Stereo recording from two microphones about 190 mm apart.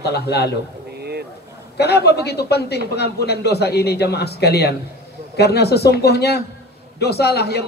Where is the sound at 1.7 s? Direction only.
60° left (ahead or behind).